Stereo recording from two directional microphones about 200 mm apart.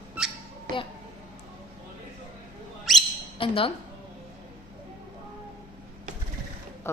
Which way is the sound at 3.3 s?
25° left (ahead or behind).